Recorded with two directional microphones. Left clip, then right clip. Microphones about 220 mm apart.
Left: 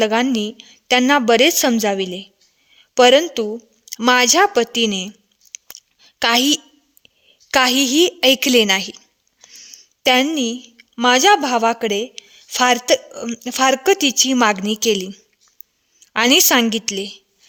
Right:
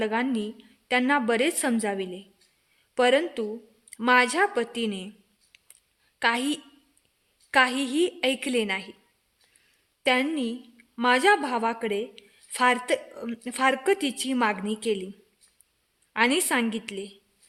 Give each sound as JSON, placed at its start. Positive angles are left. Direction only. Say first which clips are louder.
{"t": 0.0, "sound": "a woman's voice", "louder": "left 10 dB", "side_deg": 45}
{"t": 6.0, "sound": "a sound", "louder": "left 9 dB", "side_deg": 50}
{"t": 7.5, "sound": "a woman's voice", "louder": "left 8 dB", "side_deg": 45}